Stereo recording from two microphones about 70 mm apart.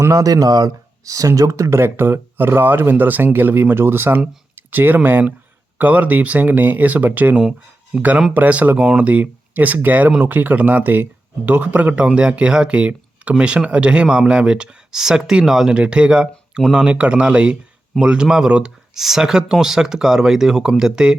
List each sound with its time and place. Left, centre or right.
0.1 s speech: right
4.5 s a sound: right
5.7 s speech: right